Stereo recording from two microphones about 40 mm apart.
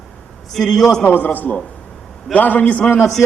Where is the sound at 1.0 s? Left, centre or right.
Left.